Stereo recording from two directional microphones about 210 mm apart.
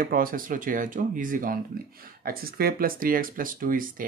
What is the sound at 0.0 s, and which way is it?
Speech, 40° right (ahead or behind).